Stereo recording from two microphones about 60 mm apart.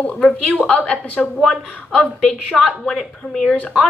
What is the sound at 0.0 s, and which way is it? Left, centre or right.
A woman's voice, centre.